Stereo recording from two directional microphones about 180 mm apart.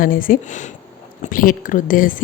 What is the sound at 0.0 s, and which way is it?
Speech, 50° left (ahead or behind).